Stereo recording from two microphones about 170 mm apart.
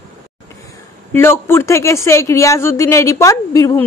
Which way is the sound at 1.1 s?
15° left (ahead or behind).